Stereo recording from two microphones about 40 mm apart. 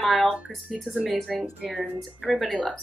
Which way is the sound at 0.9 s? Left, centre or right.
Left.